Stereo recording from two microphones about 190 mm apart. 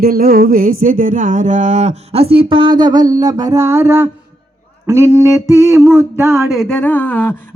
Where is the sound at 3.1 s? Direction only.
20° right (ahead or behind).